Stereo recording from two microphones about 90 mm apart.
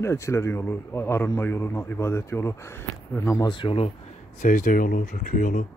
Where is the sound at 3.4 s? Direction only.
65° left (ahead or behind).